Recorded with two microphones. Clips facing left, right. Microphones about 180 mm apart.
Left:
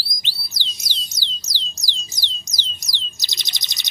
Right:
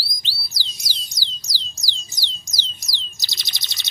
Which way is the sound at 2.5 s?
20° left (ahead or behind).